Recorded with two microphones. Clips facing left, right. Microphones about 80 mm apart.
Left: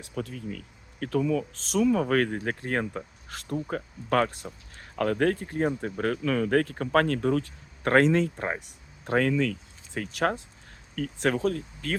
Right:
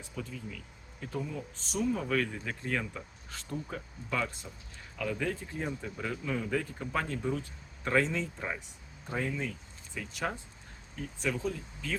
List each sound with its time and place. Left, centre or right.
0.0 s speech: left
3.2 s speech: left
8.4 s speech: left
9.0 s speech: left